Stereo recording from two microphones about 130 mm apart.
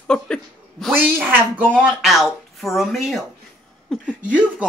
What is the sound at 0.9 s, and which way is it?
Speech, 15° right (ahead or behind).